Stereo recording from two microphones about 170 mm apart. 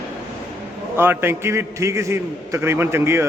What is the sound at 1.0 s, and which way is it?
A man's voice, 15° right (ahead or behind).